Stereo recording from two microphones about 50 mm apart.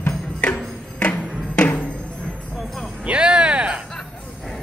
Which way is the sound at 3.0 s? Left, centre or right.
Centre.